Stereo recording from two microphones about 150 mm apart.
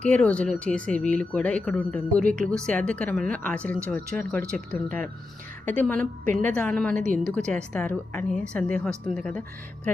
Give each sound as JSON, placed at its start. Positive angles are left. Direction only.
{"t": 0.0, "sound": "speech", "side_deg": 10}